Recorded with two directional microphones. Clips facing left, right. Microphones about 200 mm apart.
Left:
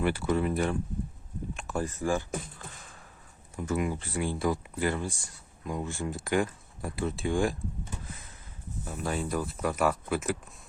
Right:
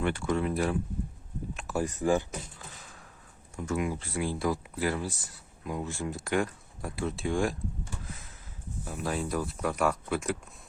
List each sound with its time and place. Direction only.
0.0 s speech: 5° left (ahead or behind)
1.5 s a sound: centre (ahead or behind)
1.8 s speech: 15° right (ahead or behind)
3.5 s speech: 5° left (ahead or behind)
8.0 s a sound: centre (ahead or behind)
8.8 s speech: centre (ahead or behind)